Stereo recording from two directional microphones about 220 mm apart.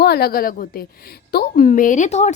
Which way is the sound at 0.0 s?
45° left (ahead or behind).